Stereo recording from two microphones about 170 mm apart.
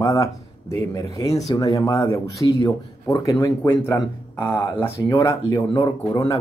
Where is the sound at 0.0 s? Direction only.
20° left (ahead or behind).